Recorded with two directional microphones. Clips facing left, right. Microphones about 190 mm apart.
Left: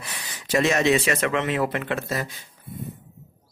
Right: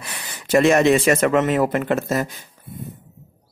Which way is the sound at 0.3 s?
55° right (ahead or behind).